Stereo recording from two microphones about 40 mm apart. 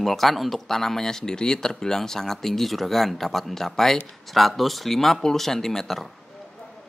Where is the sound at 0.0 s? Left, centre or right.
Centre.